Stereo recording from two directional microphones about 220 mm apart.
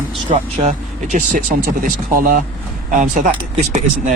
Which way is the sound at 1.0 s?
40° right (ahead or behind).